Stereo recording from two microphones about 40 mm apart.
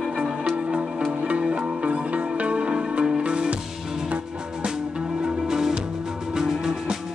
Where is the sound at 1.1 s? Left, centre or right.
Right.